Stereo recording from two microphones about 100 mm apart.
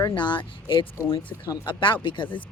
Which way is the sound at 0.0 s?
50° left (ahead or behind).